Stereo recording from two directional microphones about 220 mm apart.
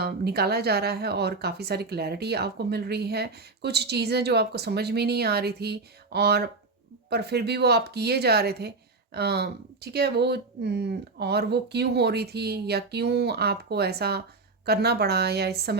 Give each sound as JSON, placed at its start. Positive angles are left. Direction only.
{"t": 0.0, "sound": "speech", "side_deg": -45}